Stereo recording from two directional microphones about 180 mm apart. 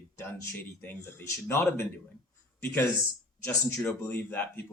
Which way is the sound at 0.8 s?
10° left (ahead or behind).